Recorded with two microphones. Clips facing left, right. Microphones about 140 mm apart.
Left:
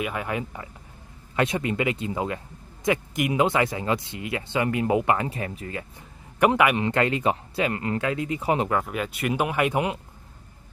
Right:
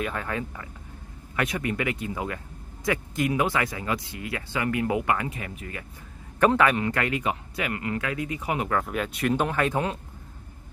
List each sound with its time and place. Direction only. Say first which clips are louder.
0.0 s speech: left 1 dB; 10° left (ahead or behind); by 5.9 s 30° left (ahead or behind)
6.4 s speech: left 1 dB; 15° left (ahead or behind)
8.8 s speech: right 1 dB; centre (ahead or behind)